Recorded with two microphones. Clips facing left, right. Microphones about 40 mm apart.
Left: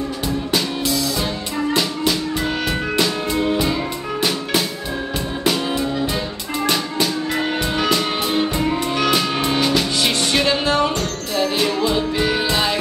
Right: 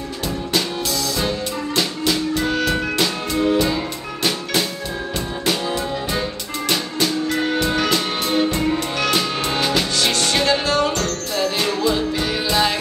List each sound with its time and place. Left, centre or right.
2.3 s music: centre
7.3 s music: centre
9.6 s music: centre
9.9 s music: centre
10.7 s music: left